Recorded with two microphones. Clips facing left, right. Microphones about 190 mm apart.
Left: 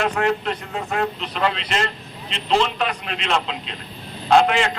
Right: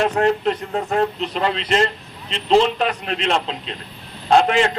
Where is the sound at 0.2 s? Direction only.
35° right (ahead or behind).